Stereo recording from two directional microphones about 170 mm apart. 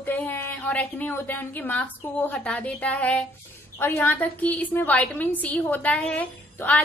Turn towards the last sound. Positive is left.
turn(degrees=10)  # may be behind; listen again after turning